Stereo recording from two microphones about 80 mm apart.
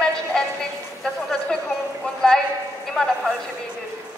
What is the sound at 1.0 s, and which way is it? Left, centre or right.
Speech, centre.